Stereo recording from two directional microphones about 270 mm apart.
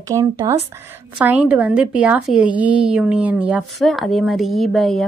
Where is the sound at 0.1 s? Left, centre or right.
Centre.